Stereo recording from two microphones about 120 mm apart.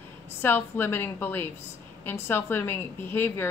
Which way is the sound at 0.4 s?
20° left (ahead or behind).